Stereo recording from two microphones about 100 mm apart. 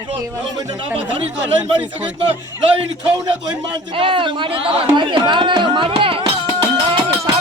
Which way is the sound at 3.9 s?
60° right (ahead or behind).